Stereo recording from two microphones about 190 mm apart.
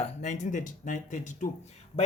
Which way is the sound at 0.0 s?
40° left (ahead or behind).